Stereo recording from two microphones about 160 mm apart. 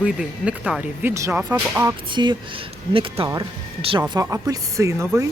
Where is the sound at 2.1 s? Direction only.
30° right (ahead or behind).